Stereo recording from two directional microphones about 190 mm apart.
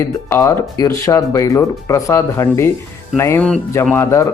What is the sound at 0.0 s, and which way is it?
Speech, 15° left (ahead or behind).